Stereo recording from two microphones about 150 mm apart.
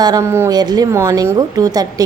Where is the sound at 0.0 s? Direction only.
25° right (ahead or behind).